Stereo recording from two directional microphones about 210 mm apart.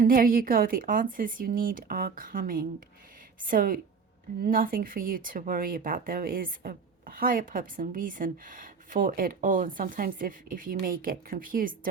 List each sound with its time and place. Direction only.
0.0 s speech: 40° right (ahead or behind)